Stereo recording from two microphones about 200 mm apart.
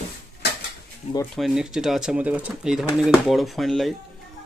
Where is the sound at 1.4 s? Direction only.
Centre (ahead or behind).